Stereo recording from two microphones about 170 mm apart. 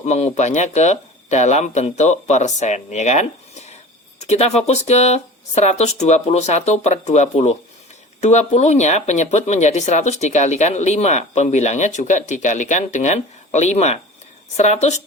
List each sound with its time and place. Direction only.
0.0 s speech: 40° left (ahead or behind)